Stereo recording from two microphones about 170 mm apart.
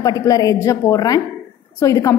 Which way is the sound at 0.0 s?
20° left (ahead or behind).